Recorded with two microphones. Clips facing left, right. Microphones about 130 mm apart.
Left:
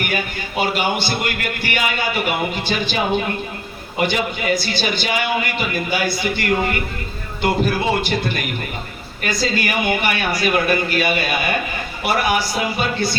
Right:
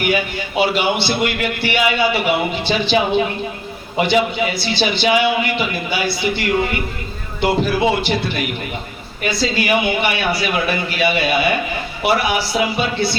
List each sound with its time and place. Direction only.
0.0 s a man's voice: 45° left (ahead or behind)
7.6 s a man's voice: 45° left (ahead or behind)